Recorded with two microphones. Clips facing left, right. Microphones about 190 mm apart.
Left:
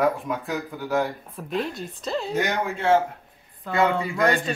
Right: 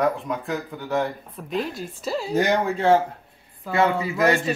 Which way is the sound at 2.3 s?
35° right (ahead or behind).